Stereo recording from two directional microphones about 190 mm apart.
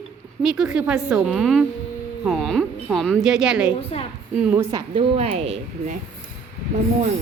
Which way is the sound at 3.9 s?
30° left (ahead or behind).